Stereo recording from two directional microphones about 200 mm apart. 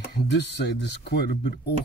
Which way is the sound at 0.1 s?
60° left (ahead or behind).